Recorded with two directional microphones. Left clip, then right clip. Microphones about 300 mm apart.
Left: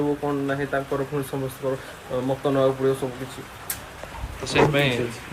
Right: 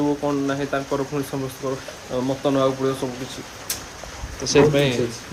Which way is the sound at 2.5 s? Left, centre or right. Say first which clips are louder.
Right 1 dB; centre.